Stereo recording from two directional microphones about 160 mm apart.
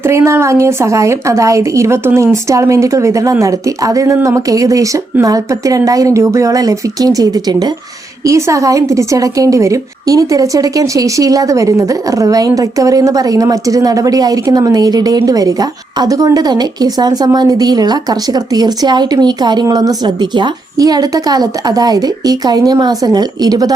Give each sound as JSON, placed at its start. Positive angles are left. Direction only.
{"t": 0.0, "sound": "a woman's voice", "side_deg": -15}